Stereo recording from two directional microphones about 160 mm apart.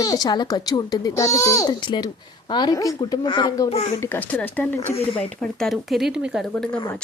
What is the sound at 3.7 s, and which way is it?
Speech, 45° left (ahead or behind).